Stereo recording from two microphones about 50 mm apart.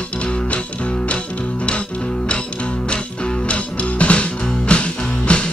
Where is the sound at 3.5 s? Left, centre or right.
Left.